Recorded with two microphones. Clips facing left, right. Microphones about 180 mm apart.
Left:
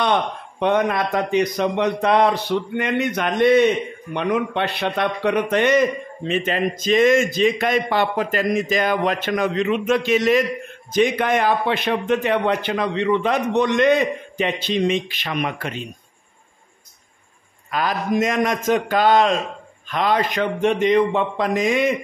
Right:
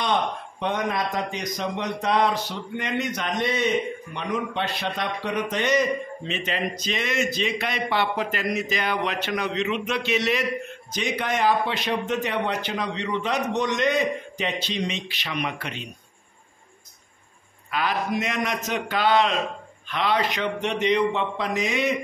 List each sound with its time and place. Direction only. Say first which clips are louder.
0.0 s a man's voice: left 4 dB; 60° left (ahead or behind); by 15.9 s 45° left (ahead or behind)
17.6 s a man's voice: left 4 dB; 45° left (ahead or behind)